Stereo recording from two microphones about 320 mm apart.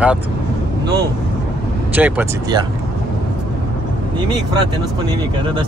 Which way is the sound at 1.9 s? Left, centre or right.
Centre.